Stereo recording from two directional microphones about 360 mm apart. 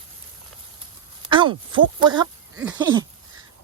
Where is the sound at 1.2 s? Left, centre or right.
Centre.